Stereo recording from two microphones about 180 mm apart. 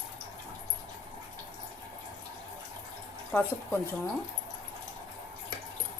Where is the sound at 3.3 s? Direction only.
10° left (ahead or behind).